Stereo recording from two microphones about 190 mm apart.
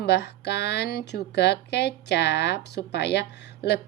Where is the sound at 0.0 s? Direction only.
60° left (ahead or behind).